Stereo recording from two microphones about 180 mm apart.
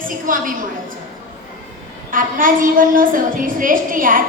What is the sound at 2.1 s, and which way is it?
A woman's voice, 50° right (ahead or behind).